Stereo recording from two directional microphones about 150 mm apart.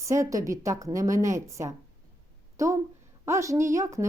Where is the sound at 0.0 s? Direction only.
20° right (ahead or behind).